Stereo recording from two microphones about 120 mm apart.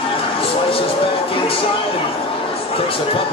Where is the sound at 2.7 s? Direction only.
50° left (ahead or behind).